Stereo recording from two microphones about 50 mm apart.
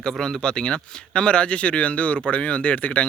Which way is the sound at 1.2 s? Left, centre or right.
Left.